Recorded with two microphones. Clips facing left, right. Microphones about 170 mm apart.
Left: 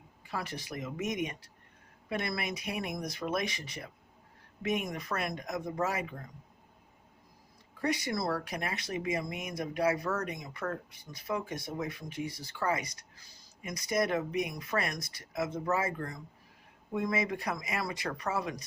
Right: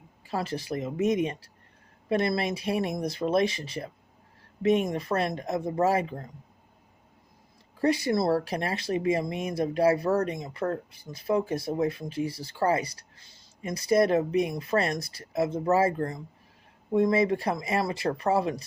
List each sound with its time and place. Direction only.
0.3 s speech: 25° right (ahead or behind)
7.8 s speech: 30° right (ahead or behind)